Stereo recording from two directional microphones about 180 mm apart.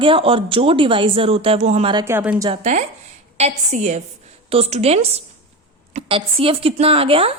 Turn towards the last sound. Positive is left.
turn(degrees=-30)  # may be behind; listen again after turning